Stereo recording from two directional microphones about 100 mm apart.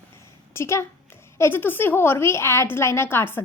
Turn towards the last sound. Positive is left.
turn(degrees=20)  # may be behind; listen again after turning